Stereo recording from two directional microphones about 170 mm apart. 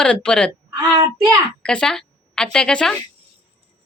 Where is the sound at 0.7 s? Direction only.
20° right (ahead or behind).